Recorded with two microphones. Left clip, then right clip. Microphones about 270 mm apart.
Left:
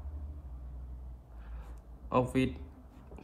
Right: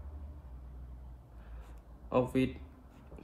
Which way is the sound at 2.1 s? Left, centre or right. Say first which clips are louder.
Left 1 dB; left.